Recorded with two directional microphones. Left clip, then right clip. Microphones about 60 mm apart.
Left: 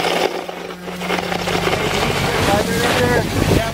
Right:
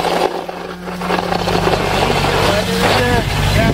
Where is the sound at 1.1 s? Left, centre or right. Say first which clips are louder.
Right 3 dB; left.